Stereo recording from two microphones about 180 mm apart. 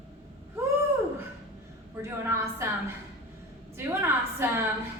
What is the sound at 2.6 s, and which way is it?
Speech, 15° right (ahead or behind).